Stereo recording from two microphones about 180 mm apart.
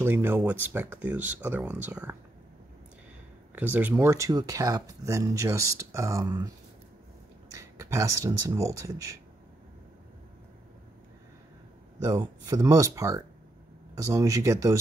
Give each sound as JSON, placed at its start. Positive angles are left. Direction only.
{"t": 0.0, "sound": "speech", "side_deg": -10}
{"t": 3.5, "sound": "speech", "side_deg": -10}
{"t": 7.5, "sound": "speech", "side_deg": -15}
{"t": 12.0, "sound": "speech", "side_deg": -20}